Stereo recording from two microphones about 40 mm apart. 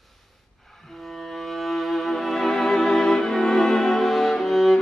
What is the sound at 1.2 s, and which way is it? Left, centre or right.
Music, centre.